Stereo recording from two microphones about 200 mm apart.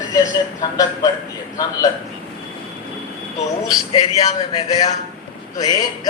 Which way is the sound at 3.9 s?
30° left (ahead or behind).